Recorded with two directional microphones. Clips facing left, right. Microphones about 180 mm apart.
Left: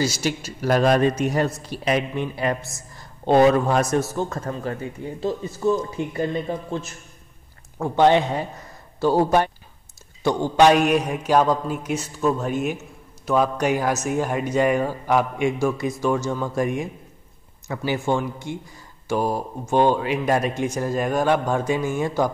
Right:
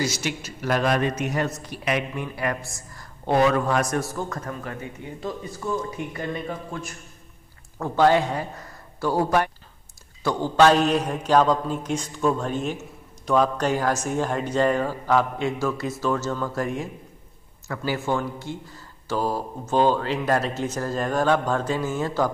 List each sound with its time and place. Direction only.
0.0 s a man's voice: 30° left (ahead or behind)
10.2 s speech: 15° left (ahead or behind)